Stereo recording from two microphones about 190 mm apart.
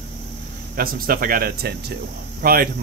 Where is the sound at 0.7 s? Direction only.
50° right (ahead or behind).